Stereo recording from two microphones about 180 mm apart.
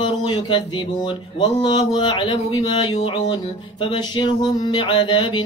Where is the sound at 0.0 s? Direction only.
25° left (ahead or behind).